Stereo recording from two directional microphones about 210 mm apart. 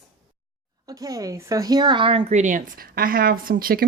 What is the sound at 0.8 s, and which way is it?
A woman's voice, 15° right (ahead or behind).